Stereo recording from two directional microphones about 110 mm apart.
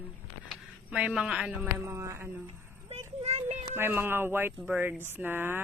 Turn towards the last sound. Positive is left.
turn(degrees=-20)  # may be behind; listen again after turning